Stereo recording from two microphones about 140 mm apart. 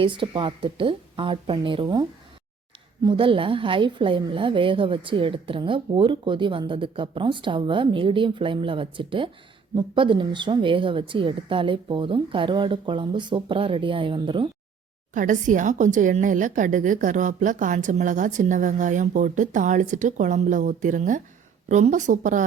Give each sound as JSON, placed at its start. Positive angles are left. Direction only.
{"t": 0.0, "sound": "a woman's voice", "side_deg": -40}
{"t": 15.1, "sound": "a woman's voice", "side_deg": -65}